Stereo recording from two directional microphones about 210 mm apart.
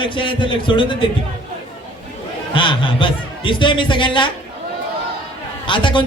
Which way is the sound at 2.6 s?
25° left (ahead or behind).